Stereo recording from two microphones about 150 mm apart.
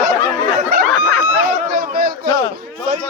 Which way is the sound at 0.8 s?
10° left (ahead or behind).